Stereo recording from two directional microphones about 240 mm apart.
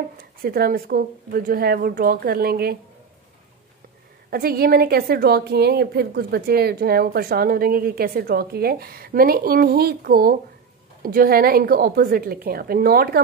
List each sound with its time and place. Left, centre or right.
0.2 s a woman's voice: right
4.3 s a woman's voice: right